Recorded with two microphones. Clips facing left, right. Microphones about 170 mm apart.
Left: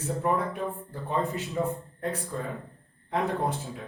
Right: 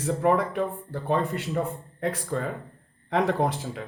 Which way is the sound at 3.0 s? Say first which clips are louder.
Right 4 dB; 90° right.